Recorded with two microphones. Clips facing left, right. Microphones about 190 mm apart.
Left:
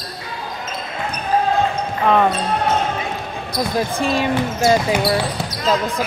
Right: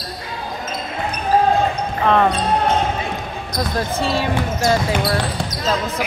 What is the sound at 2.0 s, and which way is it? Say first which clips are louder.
Speech: even; 5° left (ahead or behind).